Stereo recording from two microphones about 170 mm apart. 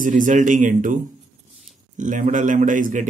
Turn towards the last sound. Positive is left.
turn(degrees=-50)  # may be behind; listen again after turning